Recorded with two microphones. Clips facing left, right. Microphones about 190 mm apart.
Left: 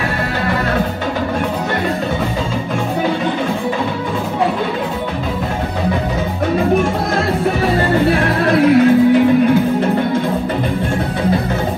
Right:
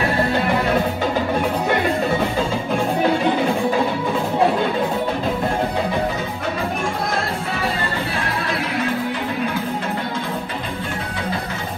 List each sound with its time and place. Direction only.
8.0 s music: 55° left (ahead or behind)